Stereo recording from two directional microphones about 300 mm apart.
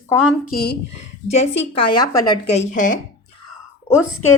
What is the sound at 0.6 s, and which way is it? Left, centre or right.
Speech, left.